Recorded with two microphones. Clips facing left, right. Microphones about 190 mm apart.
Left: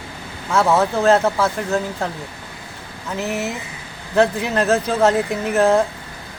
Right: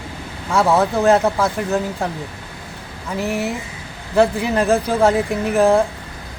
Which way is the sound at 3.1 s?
10° right (ahead or behind).